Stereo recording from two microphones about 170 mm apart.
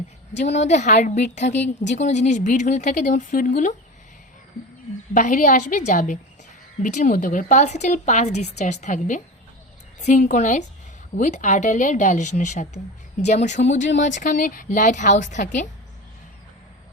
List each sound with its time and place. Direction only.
0.6 s a woman's voice: 45° left (ahead or behind)
5.1 s a woman's voice: 50° left (ahead or behind)